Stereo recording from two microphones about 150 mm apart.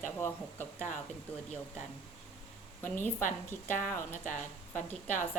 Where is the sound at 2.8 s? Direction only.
15° left (ahead or behind).